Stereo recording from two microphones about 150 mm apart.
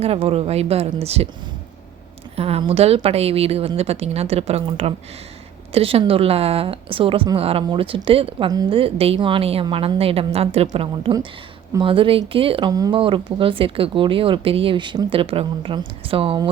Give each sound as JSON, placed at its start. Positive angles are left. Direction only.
{"t": 0.0, "sound": "a woman's voice", "side_deg": -40}
{"t": 2.3, "sound": "a woman's voice", "side_deg": -40}